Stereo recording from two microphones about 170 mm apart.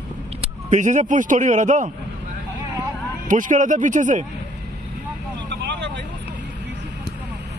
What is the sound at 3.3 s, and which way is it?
Speech, 50° right (ahead or behind).